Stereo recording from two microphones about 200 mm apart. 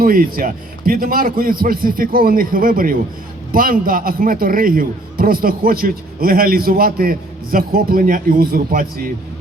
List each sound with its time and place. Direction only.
0.0 s a man's voice: 45° right (ahead or behind)